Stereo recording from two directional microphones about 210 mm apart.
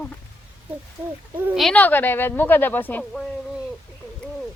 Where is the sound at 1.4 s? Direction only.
10° right (ahead or behind).